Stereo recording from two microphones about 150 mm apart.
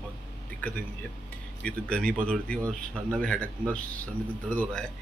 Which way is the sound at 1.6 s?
5° left (ahead or behind).